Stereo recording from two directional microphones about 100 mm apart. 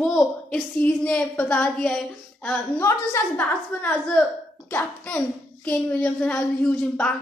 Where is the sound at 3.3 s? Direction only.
15° left (ahead or behind).